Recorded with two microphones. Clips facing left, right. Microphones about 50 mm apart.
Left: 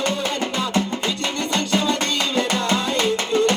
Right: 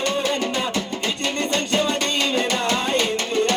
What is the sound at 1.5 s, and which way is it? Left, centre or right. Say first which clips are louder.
Music: left 2 dB; right.